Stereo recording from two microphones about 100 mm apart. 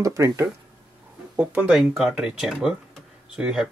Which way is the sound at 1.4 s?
15° right (ahead or behind).